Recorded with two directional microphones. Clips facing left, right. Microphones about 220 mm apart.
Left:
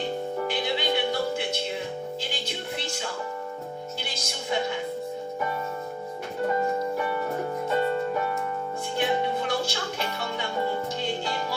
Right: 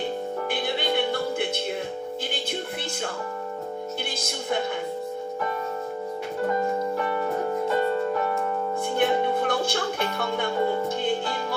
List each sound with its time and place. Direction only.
0.4 s music: 50° right (ahead or behind)
4.3 s music: 50° right (ahead or behind)
9.0 s music: 55° right (ahead or behind)